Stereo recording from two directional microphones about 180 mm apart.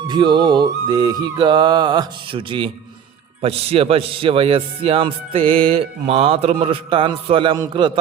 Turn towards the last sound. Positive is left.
turn(degrees=-25)  # may be behind; listen again after turning